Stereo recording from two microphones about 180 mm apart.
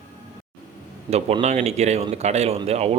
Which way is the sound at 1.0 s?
35° right (ahead or behind).